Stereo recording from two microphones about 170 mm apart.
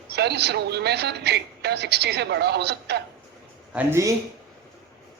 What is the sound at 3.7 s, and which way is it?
Speech, 15° right (ahead or behind).